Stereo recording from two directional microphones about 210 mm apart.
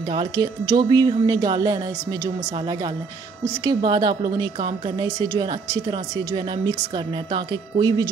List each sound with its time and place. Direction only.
0.1 s a woman's voice: 20° right (ahead or behind)
3.6 s a woman's voice: 20° right (ahead or behind)